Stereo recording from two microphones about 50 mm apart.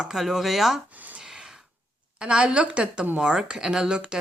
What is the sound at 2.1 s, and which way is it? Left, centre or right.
Speech, centre.